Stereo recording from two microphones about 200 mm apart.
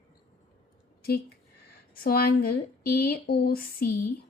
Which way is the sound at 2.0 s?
50° left (ahead or behind).